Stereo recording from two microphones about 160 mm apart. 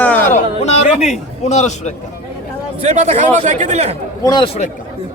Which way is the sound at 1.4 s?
45° left (ahead or behind).